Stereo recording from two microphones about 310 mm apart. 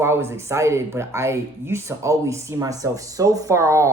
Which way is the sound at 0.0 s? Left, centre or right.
Centre.